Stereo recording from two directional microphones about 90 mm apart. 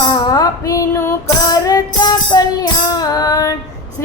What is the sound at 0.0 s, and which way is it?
Female singing, 50° left (ahead or behind).